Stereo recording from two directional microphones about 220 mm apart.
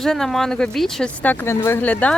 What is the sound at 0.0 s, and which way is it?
Speech, centre (ahead or behind).